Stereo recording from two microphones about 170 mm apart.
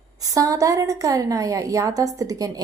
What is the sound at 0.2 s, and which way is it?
A woman's voice, 20° right (ahead or behind).